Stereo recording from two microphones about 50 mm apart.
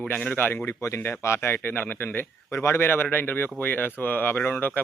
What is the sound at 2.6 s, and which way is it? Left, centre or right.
A man's voice, left.